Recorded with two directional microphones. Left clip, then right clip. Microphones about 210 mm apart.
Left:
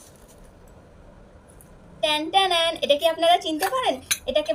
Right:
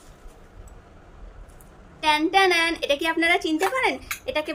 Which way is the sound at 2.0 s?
20° right (ahead or behind).